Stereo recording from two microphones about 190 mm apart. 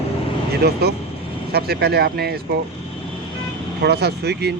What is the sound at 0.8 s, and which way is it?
Speech, 60° right (ahead or behind).